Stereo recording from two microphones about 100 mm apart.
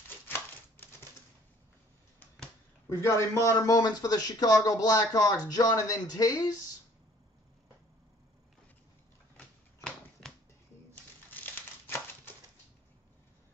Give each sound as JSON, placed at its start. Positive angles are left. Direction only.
{"t": 2.9, "sound": "a man's voice", "side_deg": 30}
{"t": 9.8, "sound": "a sound", "side_deg": 5}
{"t": 11.2, "sound": "crumpling", "side_deg": 20}